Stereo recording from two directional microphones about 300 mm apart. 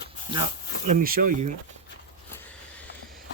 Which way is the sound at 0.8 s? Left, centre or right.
Right.